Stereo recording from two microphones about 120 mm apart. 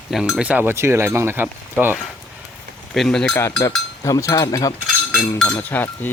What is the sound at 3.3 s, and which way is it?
Speech, 25° left (ahead or behind).